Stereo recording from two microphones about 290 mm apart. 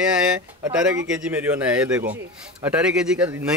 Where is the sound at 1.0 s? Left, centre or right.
Centre.